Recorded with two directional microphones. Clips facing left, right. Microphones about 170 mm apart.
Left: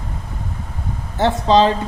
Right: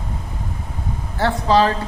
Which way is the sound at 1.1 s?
20° left (ahead or behind).